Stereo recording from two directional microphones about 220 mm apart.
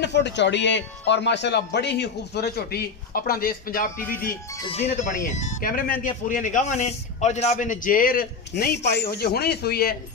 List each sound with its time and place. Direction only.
0.0 s speech: 50° left (ahead or behind)
4.6 s a man's voice: 30° left (ahead or behind); by 9.9 s 45° left (ahead or behind)